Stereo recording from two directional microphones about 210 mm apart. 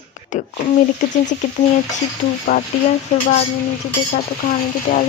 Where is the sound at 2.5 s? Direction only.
40° left (ahead or behind).